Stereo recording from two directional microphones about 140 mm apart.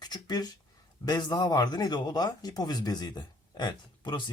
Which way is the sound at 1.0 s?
30° left (ahead or behind).